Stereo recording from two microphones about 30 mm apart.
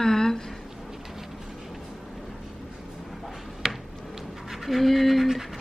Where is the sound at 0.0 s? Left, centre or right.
Centre.